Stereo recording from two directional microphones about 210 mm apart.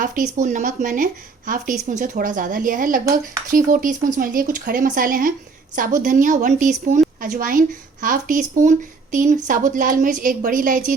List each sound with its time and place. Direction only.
0.0 s a woman's voice: 40° right (ahead or behind)